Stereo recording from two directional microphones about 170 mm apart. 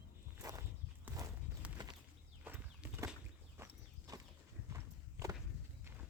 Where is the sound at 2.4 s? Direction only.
10° right (ahead or behind).